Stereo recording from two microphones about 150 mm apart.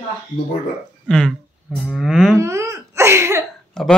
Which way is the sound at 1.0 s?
5° left (ahead or behind).